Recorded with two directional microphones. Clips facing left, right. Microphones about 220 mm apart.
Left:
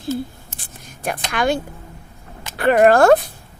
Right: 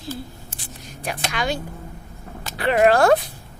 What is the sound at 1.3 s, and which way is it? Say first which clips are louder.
Speech: left 7 dB; 50° left (ahead or behind).